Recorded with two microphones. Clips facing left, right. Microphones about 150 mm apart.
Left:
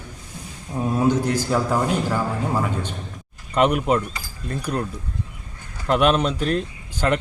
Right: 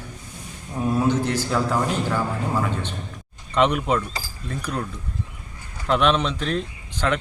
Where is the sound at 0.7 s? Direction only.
10° left (ahead or behind).